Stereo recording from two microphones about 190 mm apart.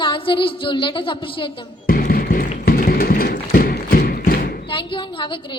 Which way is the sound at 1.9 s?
50° left (ahead or behind).